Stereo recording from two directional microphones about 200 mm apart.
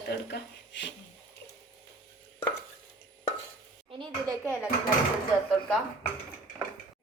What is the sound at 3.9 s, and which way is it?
Speech, 15° right (ahead or behind).